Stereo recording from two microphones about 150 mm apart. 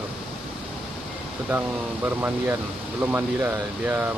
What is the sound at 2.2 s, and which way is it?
Speech, 15° right (ahead or behind).